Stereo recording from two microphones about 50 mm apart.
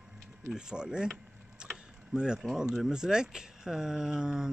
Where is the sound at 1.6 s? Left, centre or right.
Centre.